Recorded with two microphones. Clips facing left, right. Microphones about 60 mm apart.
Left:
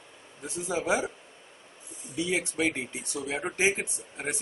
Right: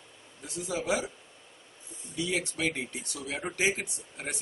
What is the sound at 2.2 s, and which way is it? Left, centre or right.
Speech, left.